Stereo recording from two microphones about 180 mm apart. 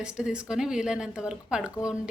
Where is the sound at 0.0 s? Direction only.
5° right (ahead or behind).